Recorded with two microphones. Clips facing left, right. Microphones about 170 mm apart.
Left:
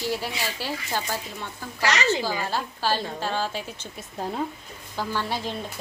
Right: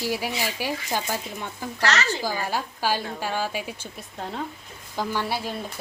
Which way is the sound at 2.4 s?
10° right (ahead or behind).